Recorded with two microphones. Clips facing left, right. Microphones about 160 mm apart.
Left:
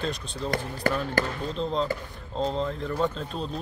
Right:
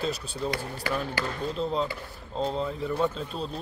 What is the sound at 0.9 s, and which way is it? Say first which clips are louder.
Speech: left 4 dB; 50° left (ahead or behind).